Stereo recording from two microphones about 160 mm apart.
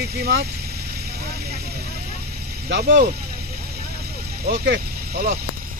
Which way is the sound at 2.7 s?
80° right.